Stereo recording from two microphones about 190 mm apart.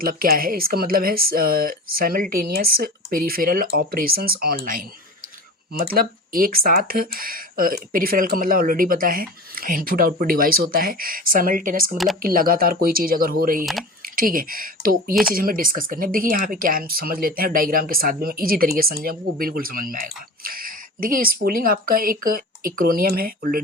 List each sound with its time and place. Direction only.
0.0 s speech: 50° right (ahead or behind)
5.9 s speech: 50° right (ahead or behind)
15.1 s speech: 5° right (ahead or behind)
15.4 s speech: 50° right (ahead or behind)